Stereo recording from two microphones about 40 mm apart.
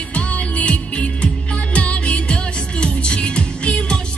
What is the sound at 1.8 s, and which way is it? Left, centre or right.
Music, left.